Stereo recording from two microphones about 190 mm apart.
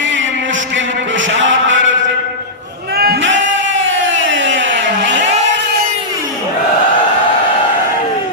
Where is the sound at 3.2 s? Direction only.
80° right.